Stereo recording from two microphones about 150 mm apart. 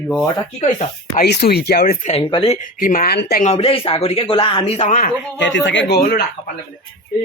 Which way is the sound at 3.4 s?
40° left (ahead or behind).